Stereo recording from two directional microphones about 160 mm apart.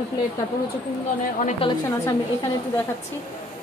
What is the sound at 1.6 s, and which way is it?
Speech, 35° left (ahead or behind).